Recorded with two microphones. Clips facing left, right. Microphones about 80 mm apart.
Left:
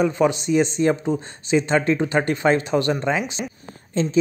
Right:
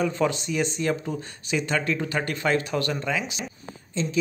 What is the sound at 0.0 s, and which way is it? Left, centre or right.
A woman's voice, left.